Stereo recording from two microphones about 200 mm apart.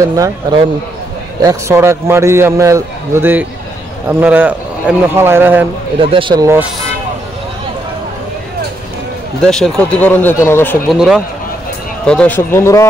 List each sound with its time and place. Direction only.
0.2 s a man's voice: 20° right (ahead or behind)
5.9 s speech: 25° right (ahead or behind)
9.4 s speech: 5° left (ahead or behind)
11.0 s speech: centre (ahead or behind); by 12.8 s 15° left (ahead or behind)